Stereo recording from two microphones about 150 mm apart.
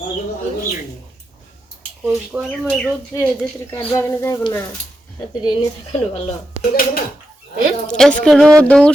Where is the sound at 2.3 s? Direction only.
5° right (ahead or behind).